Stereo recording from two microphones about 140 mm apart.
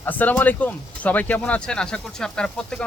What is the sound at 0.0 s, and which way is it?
Speech, 10° left (ahead or behind).